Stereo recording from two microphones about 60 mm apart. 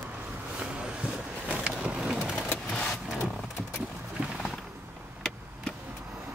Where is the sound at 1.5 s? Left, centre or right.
Centre.